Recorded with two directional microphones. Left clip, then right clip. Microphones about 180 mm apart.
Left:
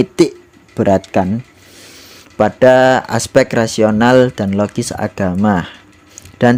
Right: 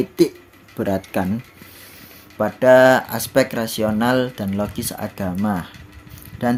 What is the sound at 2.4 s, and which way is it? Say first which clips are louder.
Speech: left 3 dB; 45° left (ahead or behind).